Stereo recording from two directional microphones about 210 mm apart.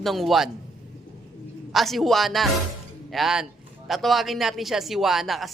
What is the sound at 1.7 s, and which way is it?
Speech, centre (ahead or behind).